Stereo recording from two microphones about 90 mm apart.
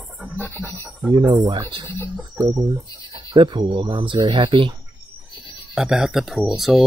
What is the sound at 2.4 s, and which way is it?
Speech, 40° right (ahead or behind).